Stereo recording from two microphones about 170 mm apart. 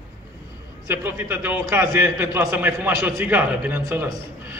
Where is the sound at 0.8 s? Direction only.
10° right (ahead or behind).